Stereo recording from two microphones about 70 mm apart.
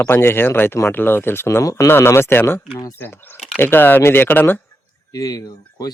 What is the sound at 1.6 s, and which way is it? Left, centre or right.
Speech, left.